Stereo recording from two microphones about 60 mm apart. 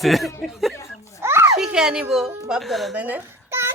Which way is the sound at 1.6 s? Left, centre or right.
Centre.